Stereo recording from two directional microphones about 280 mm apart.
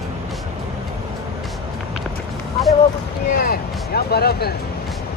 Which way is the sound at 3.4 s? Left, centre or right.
Left.